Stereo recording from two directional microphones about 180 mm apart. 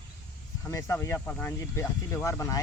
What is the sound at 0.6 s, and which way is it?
Speech, 15° left (ahead or behind).